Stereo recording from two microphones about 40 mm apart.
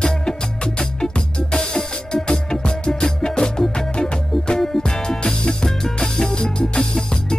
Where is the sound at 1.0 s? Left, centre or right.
Centre.